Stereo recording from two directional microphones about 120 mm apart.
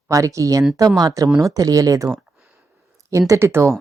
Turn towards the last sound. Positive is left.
turn(degrees=-25)  # may be behind; listen again after turning